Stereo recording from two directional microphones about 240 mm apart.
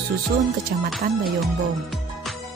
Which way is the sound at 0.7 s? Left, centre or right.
Right.